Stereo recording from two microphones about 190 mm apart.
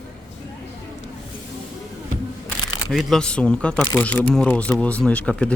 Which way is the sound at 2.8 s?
Centre (ahead or behind).